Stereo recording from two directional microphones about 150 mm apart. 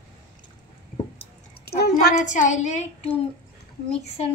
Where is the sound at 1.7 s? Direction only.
90° left.